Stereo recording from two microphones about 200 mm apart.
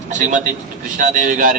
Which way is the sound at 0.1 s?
40° right (ahead or behind).